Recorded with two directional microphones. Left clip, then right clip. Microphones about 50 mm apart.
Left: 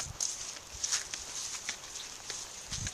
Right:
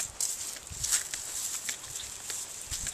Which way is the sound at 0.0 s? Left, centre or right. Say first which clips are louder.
Right 1 dB; right.